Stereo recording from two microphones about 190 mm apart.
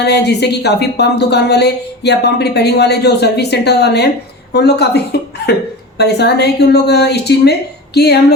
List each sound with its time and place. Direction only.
0.0 s speech: 60° left (ahead or behind)